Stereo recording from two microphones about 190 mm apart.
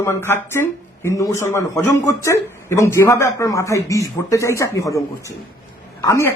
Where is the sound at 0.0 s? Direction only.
15° left (ahead or behind).